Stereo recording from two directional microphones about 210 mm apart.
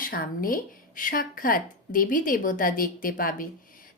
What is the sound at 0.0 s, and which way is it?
Speech, 45° left (ahead or behind).